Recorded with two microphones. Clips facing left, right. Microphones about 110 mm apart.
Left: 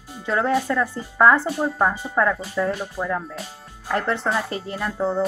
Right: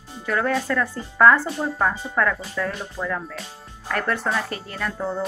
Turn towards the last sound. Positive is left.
turn(degrees=20)  # may be behind; listen again after turning